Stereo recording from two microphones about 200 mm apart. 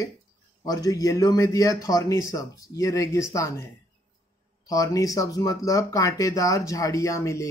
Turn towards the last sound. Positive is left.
turn(degrees=15)  # may be behind; listen again after turning